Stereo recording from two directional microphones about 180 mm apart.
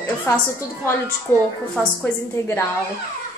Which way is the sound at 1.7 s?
10° left (ahead or behind).